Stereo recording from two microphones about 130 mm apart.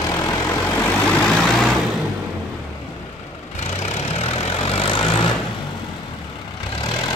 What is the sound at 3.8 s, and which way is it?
Vehicle, 50° left (ahead or behind).